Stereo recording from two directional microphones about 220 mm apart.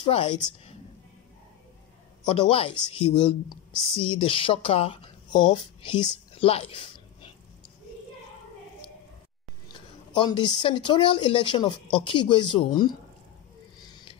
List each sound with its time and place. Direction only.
0.0 s a woman's voice: 25° left (ahead or behind)
2.2 s a woman's voice: 25° left (ahead or behind)
6.3 s a sound: 25° left (ahead or behind)
9.7 s a woman's voice: 20° left (ahead or behind)